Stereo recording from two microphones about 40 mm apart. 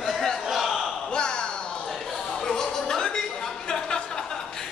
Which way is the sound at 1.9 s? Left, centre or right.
Centre.